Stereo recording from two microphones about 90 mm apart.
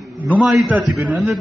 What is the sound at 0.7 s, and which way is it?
Speech, 20° right (ahead or behind).